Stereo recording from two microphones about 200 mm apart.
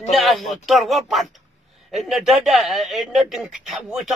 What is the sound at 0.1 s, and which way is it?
Speech, centre (ahead or behind).